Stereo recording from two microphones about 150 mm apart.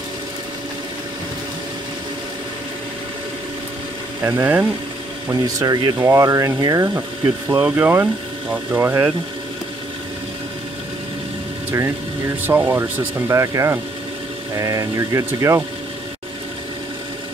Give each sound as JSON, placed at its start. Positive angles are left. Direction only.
{"t": 4.2, "sound": "speech", "side_deg": -15}
{"t": 5.3, "sound": "speech", "side_deg": -25}
{"t": 12.4, "sound": "speech", "side_deg": -10}